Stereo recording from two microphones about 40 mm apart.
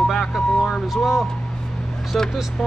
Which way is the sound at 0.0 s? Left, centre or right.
Centre.